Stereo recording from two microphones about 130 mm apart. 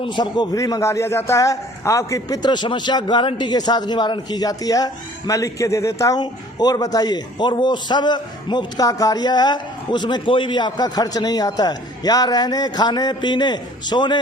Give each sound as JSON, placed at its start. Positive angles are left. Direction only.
{"t": 0.0, "sound": "a man's voice", "side_deg": 35}